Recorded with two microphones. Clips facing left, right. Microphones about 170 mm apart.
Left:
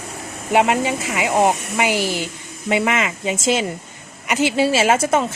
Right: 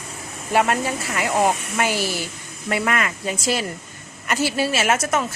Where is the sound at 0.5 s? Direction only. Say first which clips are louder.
Left 3 dB; 15° left (ahead or behind).